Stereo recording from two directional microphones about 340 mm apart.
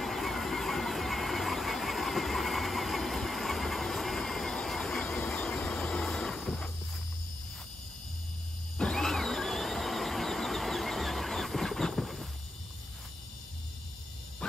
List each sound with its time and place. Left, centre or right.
0.0 s vehicle: centre
8.7 s wild animals: centre